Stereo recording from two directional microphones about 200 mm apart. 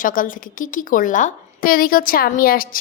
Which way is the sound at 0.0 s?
45° left (ahead or behind).